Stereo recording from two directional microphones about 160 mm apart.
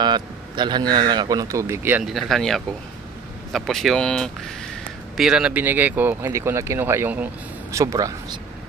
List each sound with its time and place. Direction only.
0.0 s speech: 30° right (ahead or behind); by 2.0 s 15° right (ahead or behind)
2.0 s speech: centre (ahead or behind); by 8.4 s 20° right (ahead or behind)